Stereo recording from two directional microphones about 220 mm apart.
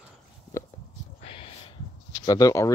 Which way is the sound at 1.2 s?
25° left (ahead or behind).